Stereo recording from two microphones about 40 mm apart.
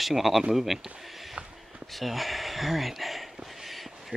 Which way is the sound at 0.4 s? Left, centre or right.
Centre.